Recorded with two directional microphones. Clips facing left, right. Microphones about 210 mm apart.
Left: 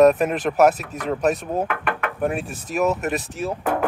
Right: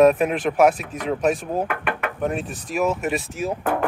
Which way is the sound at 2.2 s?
10° left (ahead or behind).